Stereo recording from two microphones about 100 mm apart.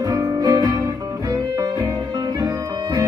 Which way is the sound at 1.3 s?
40° right (ahead or behind).